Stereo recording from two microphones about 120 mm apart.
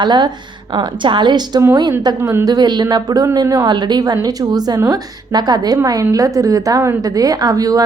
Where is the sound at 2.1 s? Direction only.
25° right (ahead or behind).